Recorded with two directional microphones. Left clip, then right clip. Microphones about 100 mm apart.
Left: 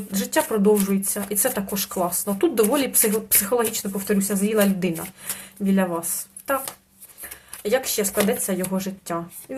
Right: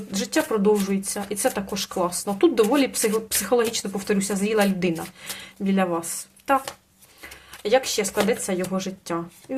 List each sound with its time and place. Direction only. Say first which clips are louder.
0.1 s speech: left 1 dB; 10° right (ahead or behind)
3.5 s speech: right 2 dB; 15° right (ahead or behind)
7.2 s a sound: right 1 dB; 15° right (ahead or behind)
8.3 s speech: even; 10° right (ahead or behind)